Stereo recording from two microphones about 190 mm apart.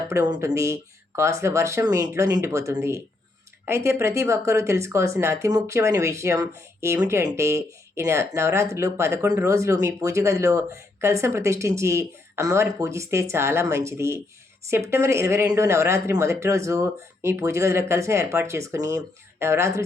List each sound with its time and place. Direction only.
0.1 s speech: 15° right (ahead or behind)